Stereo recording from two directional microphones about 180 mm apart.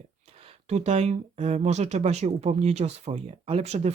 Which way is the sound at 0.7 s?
35° right (ahead or behind).